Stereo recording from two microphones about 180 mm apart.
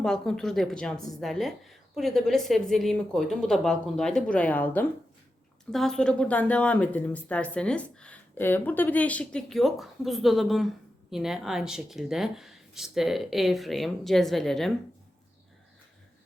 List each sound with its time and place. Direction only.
0.0 s a woman's voice: 5° left (ahead or behind)